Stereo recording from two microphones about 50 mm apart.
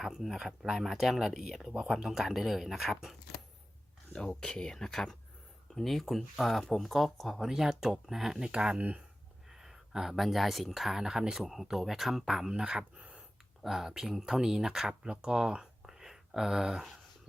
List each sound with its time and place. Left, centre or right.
0.0 s speech: centre
4.1 s speech: centre
13.0 s a sound: right
13.6 s speech: centre